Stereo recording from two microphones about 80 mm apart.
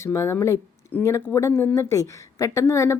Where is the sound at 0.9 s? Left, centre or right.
Left.